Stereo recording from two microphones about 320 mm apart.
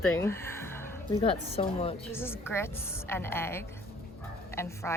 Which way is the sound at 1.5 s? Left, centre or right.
Centre.